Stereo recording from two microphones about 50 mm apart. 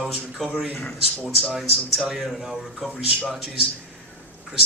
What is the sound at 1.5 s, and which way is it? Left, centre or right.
A man's voice, centre.